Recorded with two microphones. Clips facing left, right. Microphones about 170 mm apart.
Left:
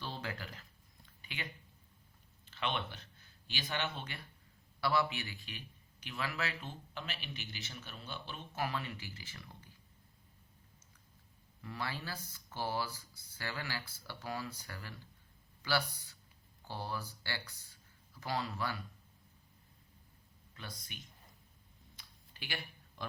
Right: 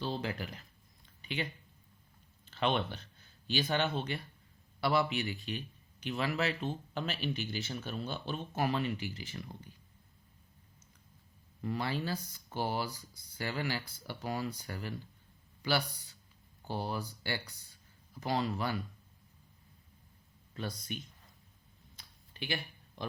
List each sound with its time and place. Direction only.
0.0 s speech: 20° right (ahead or behind)
1.2 s a sound: 20° right (ahead or behind)
2.6 s a man's voice: 35° right (ahead or behind)
4.8 s speech: 20° right (ahead or behind)
6.9 s a man's voice: 35° right (ahead or behind)
8.5 s speech: 25° right (ahead or behind)
11.6 s speech: 20° right (ahead or behind)
16.6 s speech: 20° right (ahead or behind)
20.5 s speech: 35° right (ahead or behind)